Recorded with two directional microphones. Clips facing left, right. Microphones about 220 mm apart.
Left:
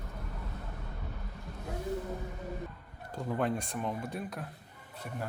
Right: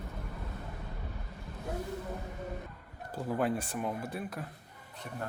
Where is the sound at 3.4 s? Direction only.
5° right (ahead or behind).